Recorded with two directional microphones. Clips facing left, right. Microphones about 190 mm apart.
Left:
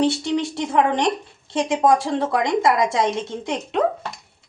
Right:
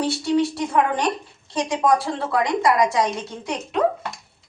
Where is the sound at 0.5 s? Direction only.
25° left (ahead or behind).